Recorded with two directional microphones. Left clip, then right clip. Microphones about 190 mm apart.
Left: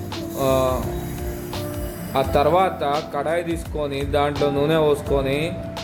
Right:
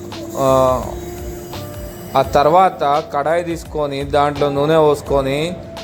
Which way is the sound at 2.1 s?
20° right (ahead or behind).